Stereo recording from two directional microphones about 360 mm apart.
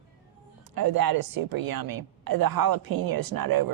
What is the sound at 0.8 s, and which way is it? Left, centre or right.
A woman's voice, right.